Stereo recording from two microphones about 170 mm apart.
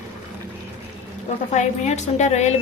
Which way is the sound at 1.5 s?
45° left (ahead or behind).